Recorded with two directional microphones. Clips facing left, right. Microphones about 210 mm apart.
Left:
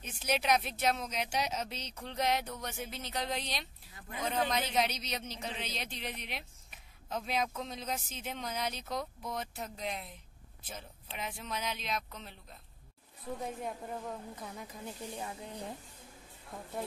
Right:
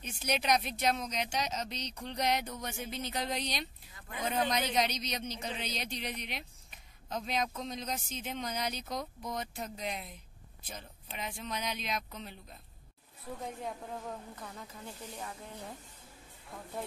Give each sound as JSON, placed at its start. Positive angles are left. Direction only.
{"t": 0.0, "sound": "a man's voice", "side_deg": 5}
{"t": 13.6, "sound": "a man's voice", "side_deg": 0}
{"t": 14.3, "sound": "speech", "side_deg": 15}